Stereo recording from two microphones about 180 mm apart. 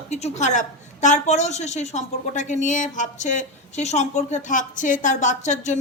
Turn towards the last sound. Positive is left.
turn(degrees=40)  # may be behind; listen again after turning